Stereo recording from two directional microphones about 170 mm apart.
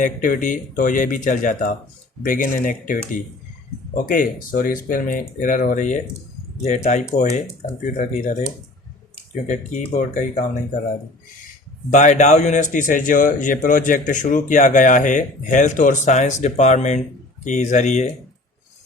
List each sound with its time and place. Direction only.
0.0 s a man's voice: 50° left (ahead or behind)
11.9 s a man's voice: 45° left (ahead or behind)